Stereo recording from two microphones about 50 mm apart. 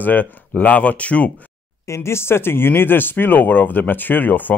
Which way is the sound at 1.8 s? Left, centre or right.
Left.